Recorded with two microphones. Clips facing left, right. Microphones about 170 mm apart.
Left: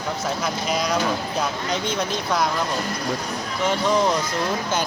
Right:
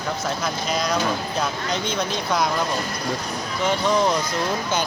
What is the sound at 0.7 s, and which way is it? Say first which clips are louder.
Speech: even; 10° left (ahead or behind).